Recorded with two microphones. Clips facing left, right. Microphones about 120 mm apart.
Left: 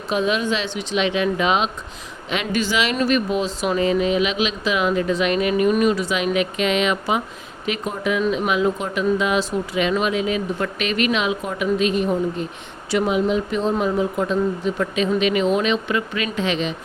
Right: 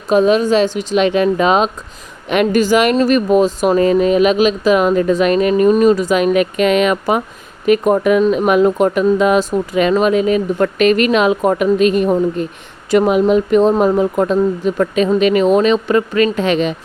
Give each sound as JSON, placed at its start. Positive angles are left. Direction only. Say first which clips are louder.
{"t": 0.1, "sound": "speech", "louder": "right 9 dB", "side_deg": -40}